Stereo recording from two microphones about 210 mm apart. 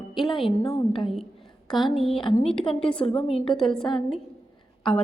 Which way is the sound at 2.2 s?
25° left (ahead or behind).